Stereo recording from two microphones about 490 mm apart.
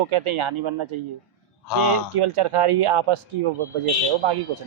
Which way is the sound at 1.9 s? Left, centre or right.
Right.